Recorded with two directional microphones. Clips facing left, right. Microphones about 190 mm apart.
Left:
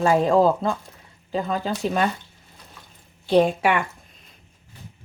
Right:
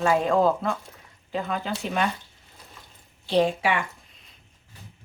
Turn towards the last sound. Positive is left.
turn(degrees=50)  # may be behind; listen again after turning